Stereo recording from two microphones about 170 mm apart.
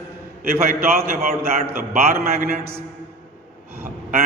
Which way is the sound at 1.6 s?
60° right (ahead or behind).